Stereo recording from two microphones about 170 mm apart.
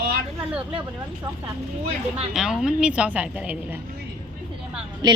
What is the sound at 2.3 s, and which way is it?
A woman's voice, 5° right (ahead or behind).